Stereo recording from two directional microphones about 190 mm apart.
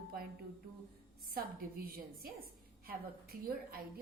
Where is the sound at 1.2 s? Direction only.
50° right (ahead or behind).